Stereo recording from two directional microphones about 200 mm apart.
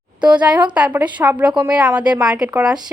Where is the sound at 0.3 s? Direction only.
5° right (ahead or behind).